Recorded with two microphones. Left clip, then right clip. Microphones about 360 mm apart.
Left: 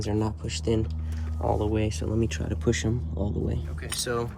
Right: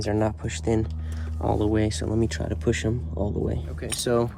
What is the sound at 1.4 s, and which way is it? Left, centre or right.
Speech, right.